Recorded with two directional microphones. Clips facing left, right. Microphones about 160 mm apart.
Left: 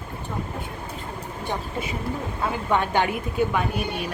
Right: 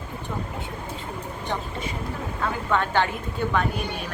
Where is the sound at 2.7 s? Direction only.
15° left (ahead or behind).